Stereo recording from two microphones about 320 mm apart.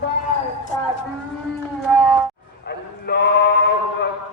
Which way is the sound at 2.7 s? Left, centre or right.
Left.